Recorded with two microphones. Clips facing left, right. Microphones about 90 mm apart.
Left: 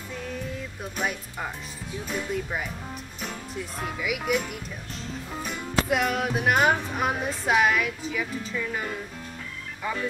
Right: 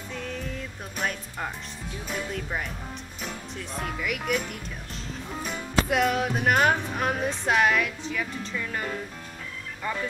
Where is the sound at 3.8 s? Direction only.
5° left (ahead or behind).